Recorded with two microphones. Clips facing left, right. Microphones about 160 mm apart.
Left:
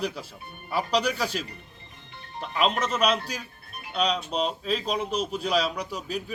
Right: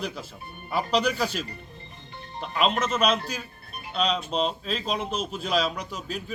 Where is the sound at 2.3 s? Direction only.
Centre (ahead or behind).